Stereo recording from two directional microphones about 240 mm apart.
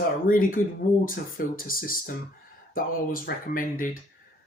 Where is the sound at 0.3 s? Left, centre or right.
Left.